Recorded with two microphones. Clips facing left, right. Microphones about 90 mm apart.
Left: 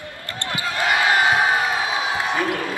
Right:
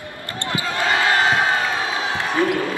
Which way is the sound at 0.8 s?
20° left (ahead or behind).